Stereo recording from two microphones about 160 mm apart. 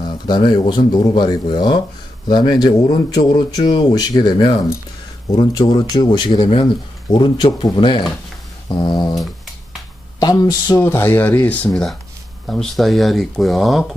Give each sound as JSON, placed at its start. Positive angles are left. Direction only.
{"t": 0.3, "sound": "speech", "side_deg": 30}
{"t": 10.2, "sound": "speech", "side_deg": 25}